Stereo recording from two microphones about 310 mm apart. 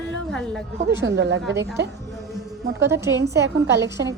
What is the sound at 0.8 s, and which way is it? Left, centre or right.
Speech, right.